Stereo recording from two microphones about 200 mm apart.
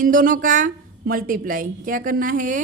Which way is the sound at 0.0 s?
40° right (ahead or behind).